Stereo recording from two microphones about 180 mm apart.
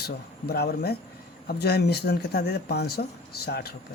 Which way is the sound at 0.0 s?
60° left (ahead or behind).